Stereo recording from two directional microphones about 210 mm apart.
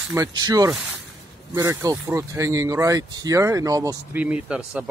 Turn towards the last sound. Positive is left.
turn(degrees=-5)  # may be behind; listen again after turning